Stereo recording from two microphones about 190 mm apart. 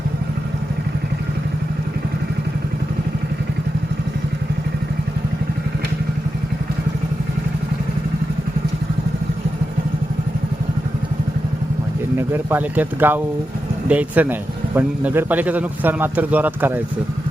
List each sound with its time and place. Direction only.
12.1 s a man's voice: 10° right (ahead or behind)